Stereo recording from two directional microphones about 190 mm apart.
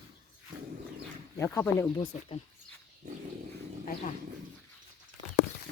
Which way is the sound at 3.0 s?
40° right (ahead or behind).